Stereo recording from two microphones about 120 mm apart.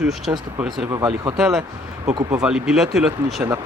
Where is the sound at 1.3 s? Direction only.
Centre (ahead or behind).